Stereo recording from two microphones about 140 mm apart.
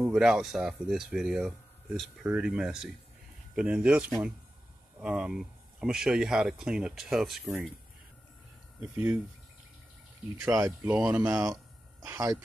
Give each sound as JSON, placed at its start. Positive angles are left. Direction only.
{"t": 0.0, "sound": "speech", "side_deg": -5}
{"t": 5.0, "sound": "speech", "side_deg": -5}
{"t": 8.9, "sound": "speech", "side_deg": -15}
{"t": 10.3, "sound": "speech", "side_deg": -20}
{"t": 11.2, "sound": "speech", "side_deg": -25}